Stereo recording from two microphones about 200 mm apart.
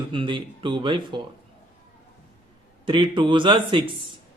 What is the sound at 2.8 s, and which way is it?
A man's voice, 25° right (ahead or behind).